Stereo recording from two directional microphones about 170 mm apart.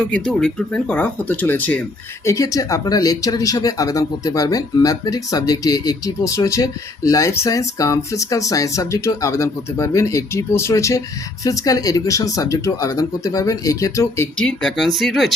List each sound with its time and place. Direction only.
0.0 s speech: 5° left (ahead or behind)
14.3 s speech: 5° left (ahead or behind)